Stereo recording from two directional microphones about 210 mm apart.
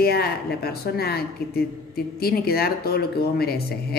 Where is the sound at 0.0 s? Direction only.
50° left (ahead or behind).